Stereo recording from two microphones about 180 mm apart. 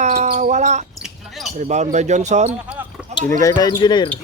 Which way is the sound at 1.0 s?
Centre (ahead or behind).